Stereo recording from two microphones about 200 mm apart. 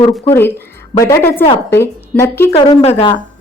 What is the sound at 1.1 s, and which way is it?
A woman's voice, 10° left (ahead or behind).